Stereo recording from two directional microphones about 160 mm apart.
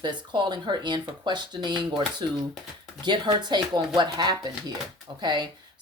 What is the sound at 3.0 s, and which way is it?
Speech, 25° right (ahead or behind).